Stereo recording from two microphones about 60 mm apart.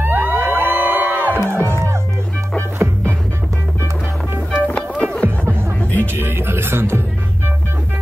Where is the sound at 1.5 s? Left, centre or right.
Right.